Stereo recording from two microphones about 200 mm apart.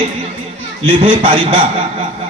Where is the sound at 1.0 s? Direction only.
25° right (ahead or behind).